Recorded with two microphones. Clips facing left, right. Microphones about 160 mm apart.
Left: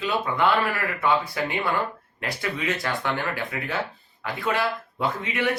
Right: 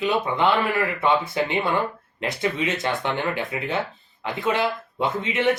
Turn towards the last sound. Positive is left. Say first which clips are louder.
# right 3 dB
turn(degrees=-25)  # may be behind; listen again after turning